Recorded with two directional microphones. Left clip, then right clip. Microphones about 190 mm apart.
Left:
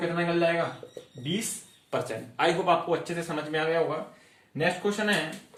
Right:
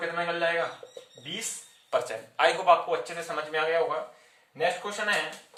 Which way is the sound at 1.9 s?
25° right (ahead or behind).